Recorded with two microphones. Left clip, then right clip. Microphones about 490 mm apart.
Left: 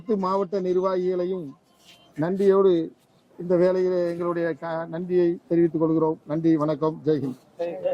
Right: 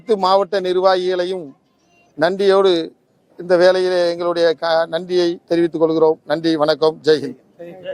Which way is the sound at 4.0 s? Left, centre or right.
Centre.